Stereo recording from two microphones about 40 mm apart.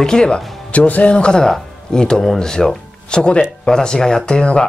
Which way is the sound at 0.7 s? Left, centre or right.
Left.